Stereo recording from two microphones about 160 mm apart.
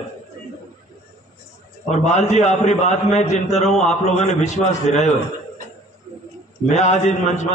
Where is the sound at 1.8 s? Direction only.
45° left (ahead or behind).